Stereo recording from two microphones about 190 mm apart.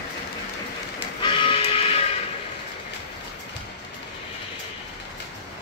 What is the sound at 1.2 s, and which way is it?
Music, 25° left (ahead or behind).